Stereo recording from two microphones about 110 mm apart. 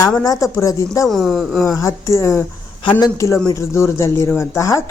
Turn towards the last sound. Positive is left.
turn(degrees=25)  # may be behind; listen again after turning